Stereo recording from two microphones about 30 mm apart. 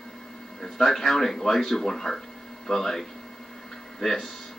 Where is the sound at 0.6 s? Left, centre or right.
Centre.